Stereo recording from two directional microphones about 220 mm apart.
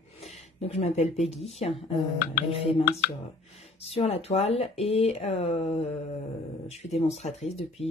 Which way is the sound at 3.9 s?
25° left (ahead or behind).